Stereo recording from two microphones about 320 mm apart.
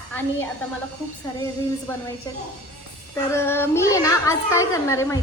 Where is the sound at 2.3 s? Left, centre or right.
Centre.